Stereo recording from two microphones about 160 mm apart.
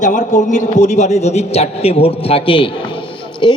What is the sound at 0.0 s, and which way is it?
A man's voice, 50° left (ahead or behind).